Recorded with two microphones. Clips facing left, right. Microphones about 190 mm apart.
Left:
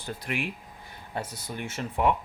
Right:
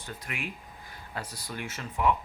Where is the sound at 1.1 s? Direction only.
25° left (ahead or behind).